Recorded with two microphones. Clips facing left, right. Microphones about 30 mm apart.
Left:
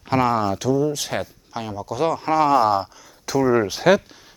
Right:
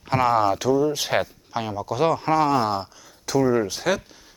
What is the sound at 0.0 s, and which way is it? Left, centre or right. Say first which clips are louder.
Speech: even; centre.